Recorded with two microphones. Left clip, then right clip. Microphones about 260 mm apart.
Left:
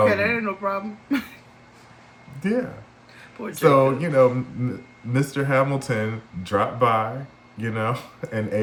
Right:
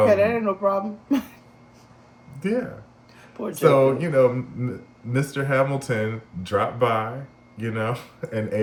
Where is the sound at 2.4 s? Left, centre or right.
Centre.